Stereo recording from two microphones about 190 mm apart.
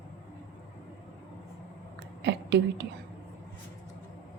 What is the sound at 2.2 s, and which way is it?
Whispering, 65° right (ahead or behind).